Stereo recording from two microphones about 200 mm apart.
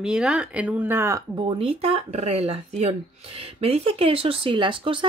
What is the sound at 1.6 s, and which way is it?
Speech, 30° right (ahead or behind).